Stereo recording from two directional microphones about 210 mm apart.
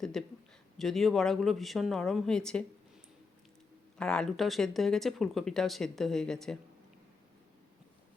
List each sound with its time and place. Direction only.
0.0 s a sound: centre (ahead or behind)
0.8 s speech: centre (ahead or behind)
3.9 s speech: 5° left (ahead or behind)